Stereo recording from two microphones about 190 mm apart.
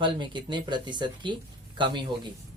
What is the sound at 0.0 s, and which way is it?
Speech, 25° right (ahead or behind).